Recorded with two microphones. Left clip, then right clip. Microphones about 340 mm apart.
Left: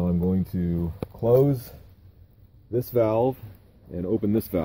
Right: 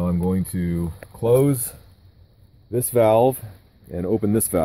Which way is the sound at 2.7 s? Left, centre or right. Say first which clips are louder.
Right 6 dB; centre.